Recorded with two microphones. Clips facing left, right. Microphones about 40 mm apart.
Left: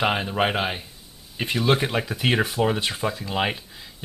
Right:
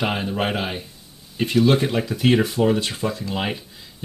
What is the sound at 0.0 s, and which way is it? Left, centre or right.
Speech, centre.